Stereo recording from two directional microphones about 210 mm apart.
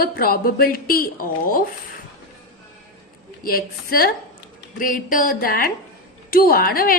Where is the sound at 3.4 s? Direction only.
45° left (ahead or behind).